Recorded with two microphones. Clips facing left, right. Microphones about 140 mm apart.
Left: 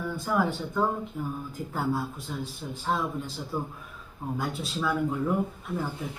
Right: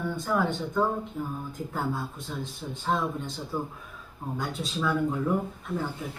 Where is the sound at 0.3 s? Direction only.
5° left (ahead or behind).